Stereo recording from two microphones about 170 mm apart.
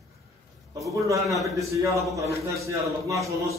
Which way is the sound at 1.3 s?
Centre (ahead or behind).